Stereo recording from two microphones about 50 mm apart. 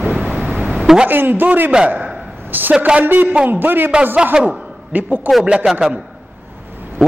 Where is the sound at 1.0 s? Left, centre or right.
Right.